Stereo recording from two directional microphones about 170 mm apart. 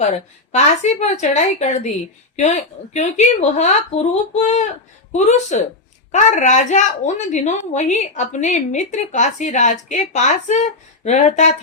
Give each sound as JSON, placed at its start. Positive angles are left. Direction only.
{"t": 0.0, "sound": "a woman's voice", "side_deg": 40}